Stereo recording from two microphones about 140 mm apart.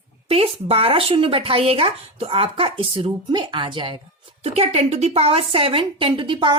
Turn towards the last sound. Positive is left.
turn(degrees=-35)  # may be behind; listen again after turning